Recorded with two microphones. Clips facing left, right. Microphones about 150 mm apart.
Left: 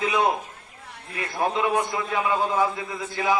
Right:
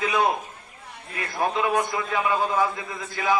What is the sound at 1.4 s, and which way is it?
A man's voice, 25° left (ahead or behind).